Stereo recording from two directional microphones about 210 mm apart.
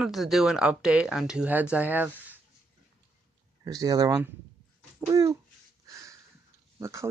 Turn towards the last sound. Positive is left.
turn(degrees=-15)  # may be behind; listen again after turning